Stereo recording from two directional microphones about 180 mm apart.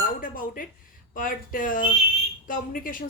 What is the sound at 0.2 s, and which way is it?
Speech, 50° left (ahead or behind).